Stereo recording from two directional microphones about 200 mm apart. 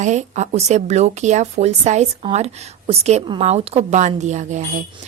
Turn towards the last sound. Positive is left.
turn(degrees=-35)  # may be behind; listen again after turning